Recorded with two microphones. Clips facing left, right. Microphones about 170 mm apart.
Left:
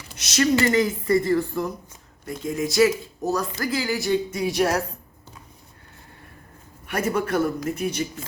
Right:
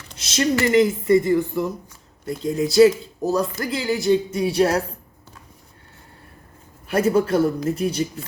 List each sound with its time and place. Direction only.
0.2 s speech: 25° right (ahead or behind)
2.4 s speech: 35° right (ahead or behind)
6.8 s speech: 30° right (ahead or behind)